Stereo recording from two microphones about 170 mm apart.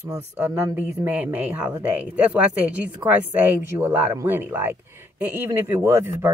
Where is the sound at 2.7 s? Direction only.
10° right (ahead or behind).